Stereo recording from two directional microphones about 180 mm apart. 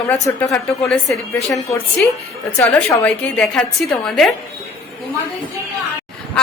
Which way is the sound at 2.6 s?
10° left (ahead or behind).